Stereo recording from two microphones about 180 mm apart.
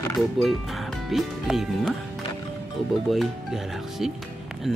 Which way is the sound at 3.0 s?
Centre (ahead or behind).